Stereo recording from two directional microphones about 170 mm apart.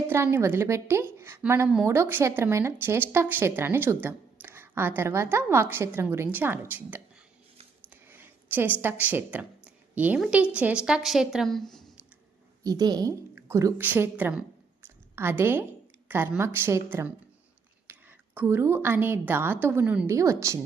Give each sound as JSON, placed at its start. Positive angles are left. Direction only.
{"t": 0.1, "sound": "speech", "side_deg": -15}
{"t": 12.6, "sound": "speech", "side_deg": -25}
{"t": 14.8, "sound": "a sound", "side_deg": -15}
{"t": 16.0, "sound": "speech", "side_deg": -10}
{"t": 17.9, "sound": "whispering", "side_deg": -10}
{"t": 18.3, "sound": "speech", "side_deg": -15}